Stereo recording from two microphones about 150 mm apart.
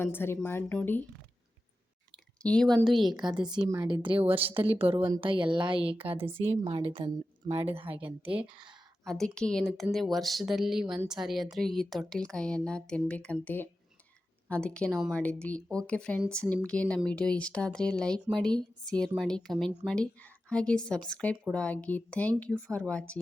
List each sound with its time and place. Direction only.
0.0 s speech: 15° left (ahead or behind)
2.4 s speech: 5° left (ahead or behind)
3.1 s a woman's voice: 30° right (ahead or behind)
6.1 s a woman's voice: 15° right (ahead or behind)
6.7 s a woman's voice: 35° right (ahead or behind)
7.9 s a woman's voice: 10° right (ahead or behind)
9.0 s speech: 5° left (ahead or behind)